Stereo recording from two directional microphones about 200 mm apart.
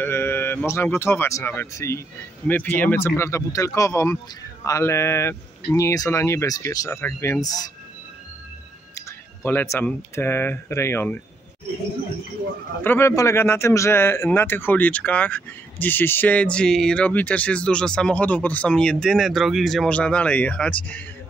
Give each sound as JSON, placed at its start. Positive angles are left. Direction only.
{"t": 0.0, "sound": "a man's voice", "side_deg": 10}
{"t": 8.9, "sound": "speech", "side_deg": 10}
{"t": 12.8, "sound": "a man's voice", "side_deg": 10}